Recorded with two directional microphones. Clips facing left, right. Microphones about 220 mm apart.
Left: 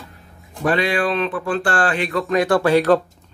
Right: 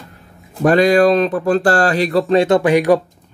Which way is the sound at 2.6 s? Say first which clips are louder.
Right 2 dB; 15° right (ahead or behind).